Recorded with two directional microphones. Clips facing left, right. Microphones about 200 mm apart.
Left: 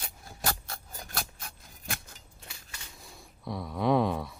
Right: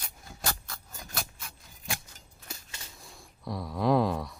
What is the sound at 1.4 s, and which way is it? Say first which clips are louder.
Scissors: left 1 dB; 50° left (ahead or behind).